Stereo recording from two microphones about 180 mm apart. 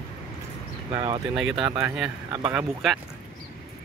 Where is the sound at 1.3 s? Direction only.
5° right (ahead or behind).